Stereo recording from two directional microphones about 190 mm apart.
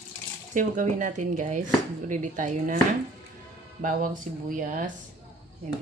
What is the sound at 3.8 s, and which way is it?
Speech, 45° right (ahead or behind).